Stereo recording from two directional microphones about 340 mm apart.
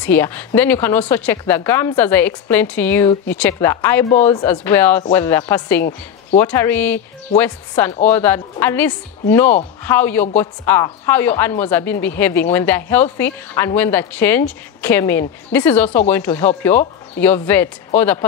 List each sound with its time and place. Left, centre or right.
0.0 s speech: centre
5.8 s a woman's voice: left
6.4 s speech: centre